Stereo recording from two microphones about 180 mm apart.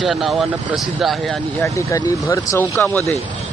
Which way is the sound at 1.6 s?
15° left (ahead or behind).